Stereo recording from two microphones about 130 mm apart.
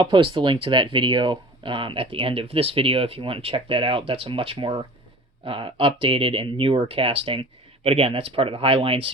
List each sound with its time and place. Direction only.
0.0 s speech: 40° right (ahead or behind)